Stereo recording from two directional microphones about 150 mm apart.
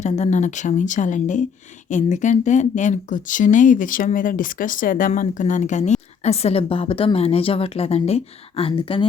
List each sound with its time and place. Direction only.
0.0 s a woman's voice: 50° left (ahead or behind); by 9.0 s 35° left (ahead or behind)